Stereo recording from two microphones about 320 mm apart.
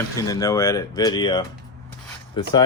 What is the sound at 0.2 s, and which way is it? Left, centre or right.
Speech, centre.